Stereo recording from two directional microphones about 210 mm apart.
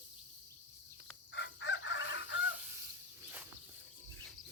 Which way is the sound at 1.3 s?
60° left (ahead or behind).